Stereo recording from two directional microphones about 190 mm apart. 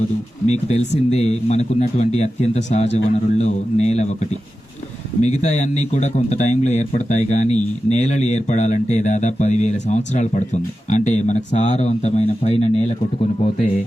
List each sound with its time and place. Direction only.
0.4 s speech: 35° left (ahead or behind)
5.2 s speech: 35° left (ahead or behind)